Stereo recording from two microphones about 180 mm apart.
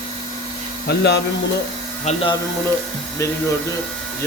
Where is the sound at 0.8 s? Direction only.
65° left (ahead or behind).